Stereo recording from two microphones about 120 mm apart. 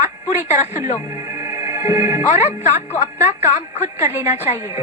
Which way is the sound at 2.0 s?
65° left (ahead or behind).